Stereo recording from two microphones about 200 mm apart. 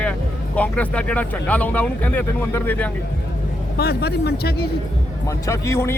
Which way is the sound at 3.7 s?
55° left (ahead or behind).